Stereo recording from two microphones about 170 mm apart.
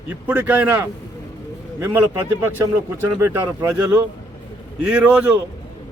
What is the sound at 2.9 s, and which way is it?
Speech, 15° right (ahead or behind).